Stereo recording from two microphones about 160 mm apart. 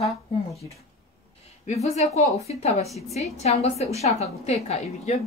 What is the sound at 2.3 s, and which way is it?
A woman's voice, 40° left (ahead or behind).